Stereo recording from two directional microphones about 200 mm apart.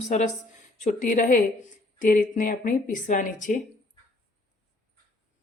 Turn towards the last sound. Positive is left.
turn(degrees=40)  # may be behind; listen again after turning